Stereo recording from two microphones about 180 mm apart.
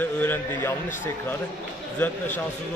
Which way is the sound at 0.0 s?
10° left (ahead or behind).